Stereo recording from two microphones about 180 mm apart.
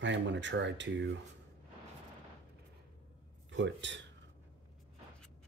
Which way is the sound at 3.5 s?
85° right.